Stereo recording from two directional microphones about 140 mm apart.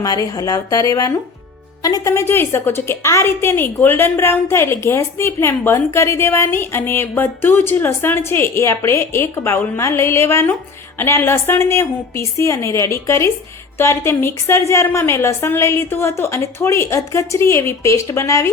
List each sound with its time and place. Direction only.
0.0 s a woman's voice: 25° left (ahead or behind)